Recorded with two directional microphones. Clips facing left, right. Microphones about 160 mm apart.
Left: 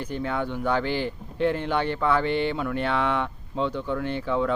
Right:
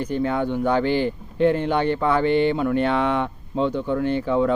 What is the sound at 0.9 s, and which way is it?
Speech, 50° right (ahead or behind).